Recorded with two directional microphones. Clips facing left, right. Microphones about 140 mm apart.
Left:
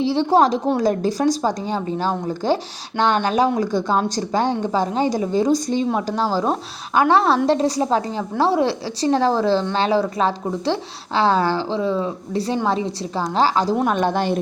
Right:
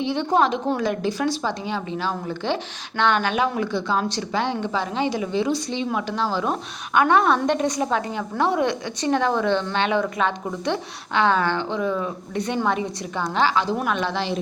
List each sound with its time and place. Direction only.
0.0 s a woman's voice: 35° left (ahead or behind); by 14.3 s 50° left (ahead or behind)